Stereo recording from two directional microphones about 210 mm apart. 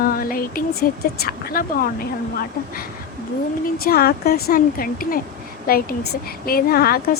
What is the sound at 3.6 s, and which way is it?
A woman's voice, 45° left (ahead or behind).